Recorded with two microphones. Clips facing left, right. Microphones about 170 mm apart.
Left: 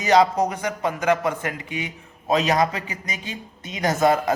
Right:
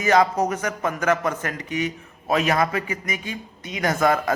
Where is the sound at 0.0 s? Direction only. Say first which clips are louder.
Left 1 dB; 20° left (ahead or behind).